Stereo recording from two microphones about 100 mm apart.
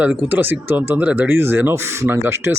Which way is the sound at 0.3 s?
20° right (ahead or behind).